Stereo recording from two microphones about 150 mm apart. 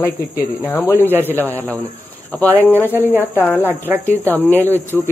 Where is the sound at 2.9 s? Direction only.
10° right (ahead or behind).